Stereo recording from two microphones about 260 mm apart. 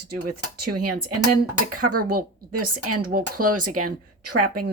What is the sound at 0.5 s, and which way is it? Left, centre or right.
A woman's voice, right.